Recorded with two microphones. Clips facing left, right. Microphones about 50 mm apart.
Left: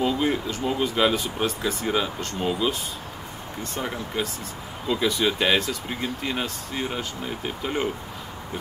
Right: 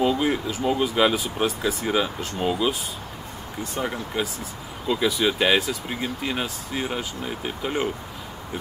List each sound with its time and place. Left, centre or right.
0.0 s speech: centre